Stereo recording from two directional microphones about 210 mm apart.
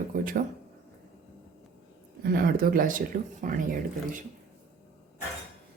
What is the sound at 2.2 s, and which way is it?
Speech, 45° right (ahead or behind).